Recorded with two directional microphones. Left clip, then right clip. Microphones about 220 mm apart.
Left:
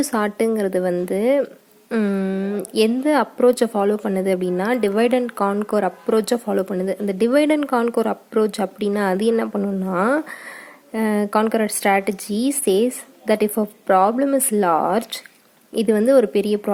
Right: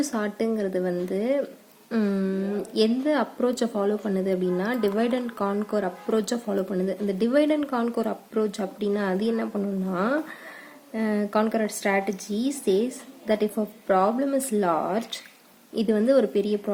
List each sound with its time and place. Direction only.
0.0 s speech: 35° left (ahead or behind)